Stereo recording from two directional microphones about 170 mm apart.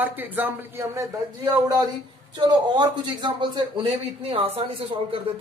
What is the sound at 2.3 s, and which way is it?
A man's voice, 25° right (ahead or behind).